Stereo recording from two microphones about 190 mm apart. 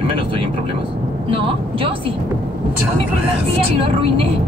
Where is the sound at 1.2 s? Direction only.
30° right (ahead or behind).